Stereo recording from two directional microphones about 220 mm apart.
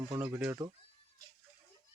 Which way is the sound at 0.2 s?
10° right (ahead or behind).